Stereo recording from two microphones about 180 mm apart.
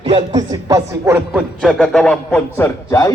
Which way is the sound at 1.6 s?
Centre (ahead or behind).